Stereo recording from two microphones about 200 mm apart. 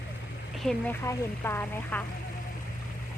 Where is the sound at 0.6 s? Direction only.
10° left (ahead or behind).